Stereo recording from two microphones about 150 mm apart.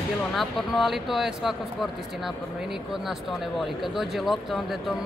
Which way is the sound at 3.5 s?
Centre (ahead or behind).